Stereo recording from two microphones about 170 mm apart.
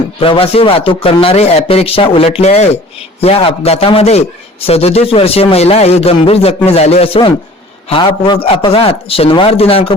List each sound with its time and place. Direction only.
0.2 s a man's voice: 35° left (ahead or behind)